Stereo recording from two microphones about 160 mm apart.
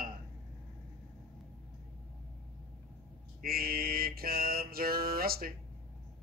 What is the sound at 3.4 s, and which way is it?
A man's voice, 70° right (ahead or behind).